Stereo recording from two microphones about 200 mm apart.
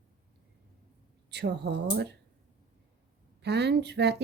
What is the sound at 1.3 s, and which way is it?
Speech, 60° right (ahead or behind).